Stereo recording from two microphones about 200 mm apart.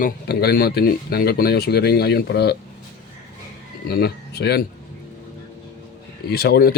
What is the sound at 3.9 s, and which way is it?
Speech, 50° left (ahead or behind).